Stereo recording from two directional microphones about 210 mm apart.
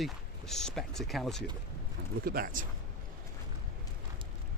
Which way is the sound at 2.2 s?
45° right (ahead or behind).